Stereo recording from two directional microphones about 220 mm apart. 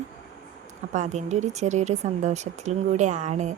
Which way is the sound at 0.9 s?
30° right (ahead or behind).